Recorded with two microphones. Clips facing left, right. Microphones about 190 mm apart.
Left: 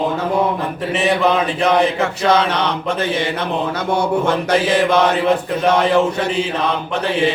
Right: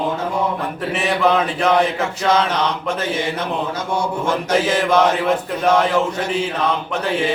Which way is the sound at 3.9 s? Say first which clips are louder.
Left 4 dB; 65° left (ahead or behind).